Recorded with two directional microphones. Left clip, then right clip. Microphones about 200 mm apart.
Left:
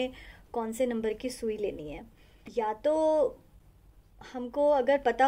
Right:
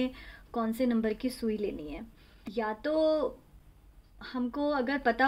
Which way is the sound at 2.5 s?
40° right (ahead or behind).